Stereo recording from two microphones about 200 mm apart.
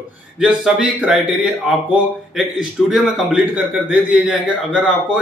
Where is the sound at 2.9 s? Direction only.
Centre (ahead or behind).